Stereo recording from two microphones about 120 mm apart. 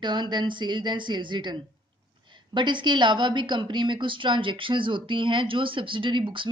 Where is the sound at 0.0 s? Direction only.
40° right (ahead or behind).